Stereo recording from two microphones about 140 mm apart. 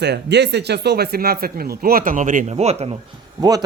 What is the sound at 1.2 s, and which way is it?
Speech, 90° right.